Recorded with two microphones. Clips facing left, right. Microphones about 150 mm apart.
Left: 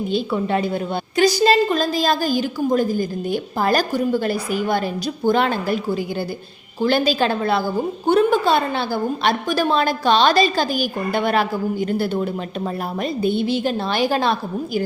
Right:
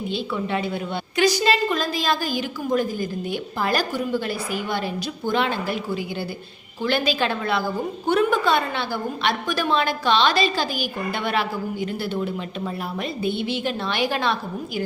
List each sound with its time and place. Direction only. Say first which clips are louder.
0.1 s a woman's voice: left 5 dB; 40° left (ahead or behind)